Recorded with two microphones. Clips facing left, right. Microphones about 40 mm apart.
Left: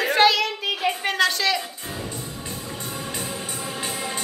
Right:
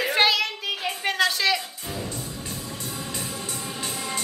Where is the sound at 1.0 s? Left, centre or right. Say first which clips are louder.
Right 1 dB; centre.